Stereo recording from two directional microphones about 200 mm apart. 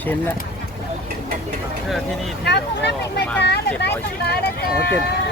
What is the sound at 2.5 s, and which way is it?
Vehicle, 55° left (ahead or behind).